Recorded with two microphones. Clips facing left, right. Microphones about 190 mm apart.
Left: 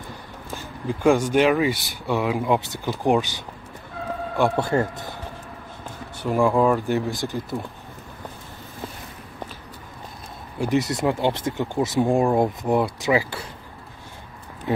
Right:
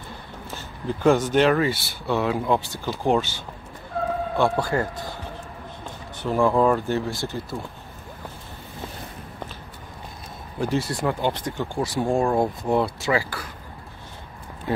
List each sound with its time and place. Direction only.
0.8 s speech: 10° left (ahead or behind)
6.2 s speech: 15° left (ahead or behind)
10.6 s speech: 15° left (ahead or behind)